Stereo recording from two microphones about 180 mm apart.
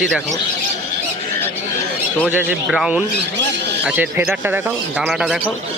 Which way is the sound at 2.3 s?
10° right (ahead or behind).